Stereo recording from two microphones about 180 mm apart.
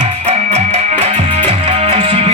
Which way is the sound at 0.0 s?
35° right (ahead or behind).